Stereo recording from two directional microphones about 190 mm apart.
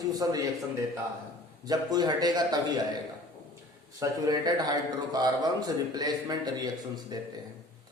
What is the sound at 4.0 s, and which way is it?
A man's voice, 20° right (ahead or behind).